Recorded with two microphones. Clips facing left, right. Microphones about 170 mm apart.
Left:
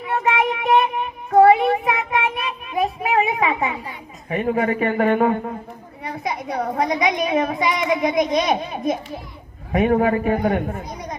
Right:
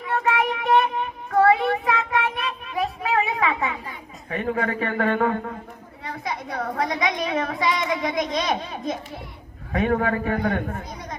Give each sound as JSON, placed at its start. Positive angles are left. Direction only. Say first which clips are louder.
{"t": 0.0, "sound": "child singing", "louder": "left 2 dB", "side_deg": 20}
{"t": 6.0, "sound": "a woman's voice", "louder": "left 4 dB", "side_deg": 20}